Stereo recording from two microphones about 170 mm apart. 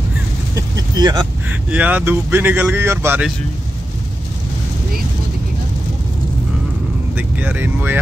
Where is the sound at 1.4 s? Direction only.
10° right (ahead or behind).